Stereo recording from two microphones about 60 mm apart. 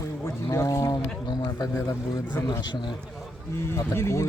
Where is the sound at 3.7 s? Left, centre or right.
Left.